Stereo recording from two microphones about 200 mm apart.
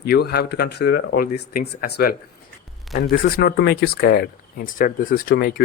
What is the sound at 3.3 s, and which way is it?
Speech, 55° left (ahead or behind).